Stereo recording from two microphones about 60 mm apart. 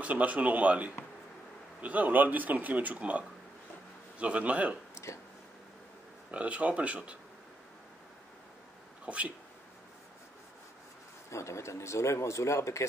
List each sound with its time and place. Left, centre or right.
0.0 s speech: right
4.9 s a sound: left
6.3 s speech: right
9.0 s speech: right
11.2 s speech: left